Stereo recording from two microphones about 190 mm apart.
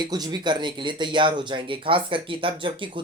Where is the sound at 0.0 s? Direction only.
20° right (ahead or behind).